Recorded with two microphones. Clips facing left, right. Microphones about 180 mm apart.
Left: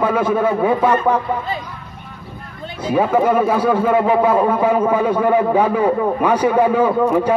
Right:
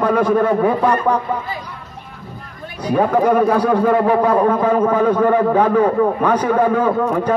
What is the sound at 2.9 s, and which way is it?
A man's voice, 5° left (ahead or behind).